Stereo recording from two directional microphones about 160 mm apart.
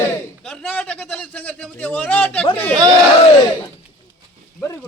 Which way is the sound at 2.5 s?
10° left (ahead or behind).